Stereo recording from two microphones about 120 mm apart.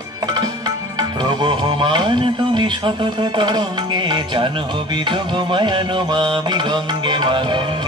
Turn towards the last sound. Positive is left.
turn(degrees=-45)  # may be behind; listen again after turning